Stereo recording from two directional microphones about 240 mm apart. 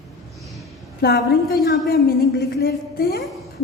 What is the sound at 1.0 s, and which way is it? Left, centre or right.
A woman's voice, left.